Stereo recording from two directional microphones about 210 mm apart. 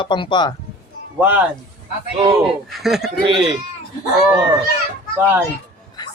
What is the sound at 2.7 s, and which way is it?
Speech, centre (ahead or behind).